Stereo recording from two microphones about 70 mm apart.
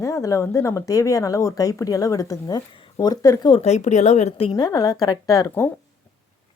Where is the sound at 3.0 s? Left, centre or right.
Left.